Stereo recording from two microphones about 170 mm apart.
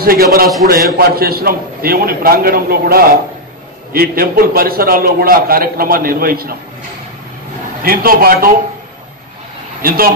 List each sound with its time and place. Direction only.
0.0 s a man's voice: 60° right (ahead or behind)
7.8 s a man's voice: 60° right (ahead or behind)
9.8 s speech: 60° right (ahead or behind)